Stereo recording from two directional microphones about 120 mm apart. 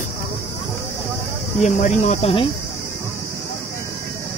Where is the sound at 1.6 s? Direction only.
85° left.